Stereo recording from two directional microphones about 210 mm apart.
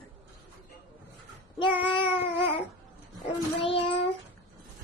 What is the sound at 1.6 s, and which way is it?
Child singing, 25° left (ahead or behind).